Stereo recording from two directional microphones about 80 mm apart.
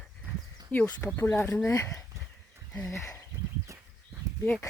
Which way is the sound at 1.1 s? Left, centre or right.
Left.